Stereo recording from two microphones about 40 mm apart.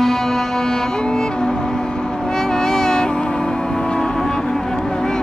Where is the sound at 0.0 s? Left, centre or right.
Centre.